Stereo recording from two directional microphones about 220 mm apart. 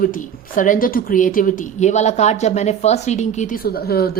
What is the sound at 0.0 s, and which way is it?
A woman's voice, 40° left (ahead or behind).